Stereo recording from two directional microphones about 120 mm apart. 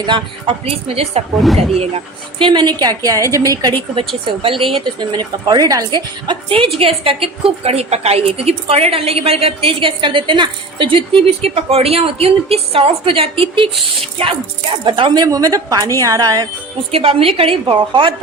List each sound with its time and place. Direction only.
0.0 s a woman's voice: 45° right (ahead or behind); by 2.0 s 60° right (ahead or behind)
2.4 s a woman's voice: 40° right (ahead or behind)
4.4 s a woman's voice: 50° right (ahead or behind)
14.8 s speech: 40° right (ahead or behind)
16.9 s a woman's voice: 55° right (ahead or behind)